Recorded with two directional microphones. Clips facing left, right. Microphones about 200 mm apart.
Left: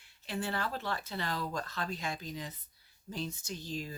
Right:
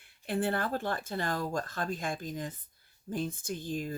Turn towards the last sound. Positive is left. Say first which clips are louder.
# right 5 dB
turn(degrees=-55)  # may be behind; listen again after turning